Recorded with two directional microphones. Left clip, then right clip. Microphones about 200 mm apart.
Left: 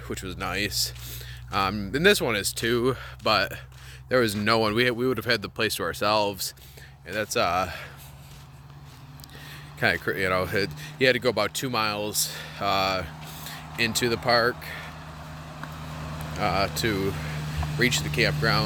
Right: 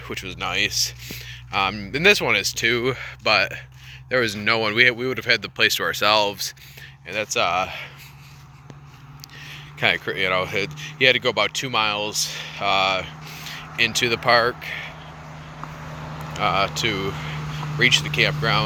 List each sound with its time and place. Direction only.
0.1 s speech: 30° left (ahead or behind)
9.5 s speech: 35° left (ahead or behind)
16.3 s speech: 30° left (ahead or behind)